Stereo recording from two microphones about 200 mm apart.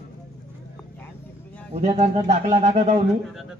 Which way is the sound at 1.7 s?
35° right (ahead or behind).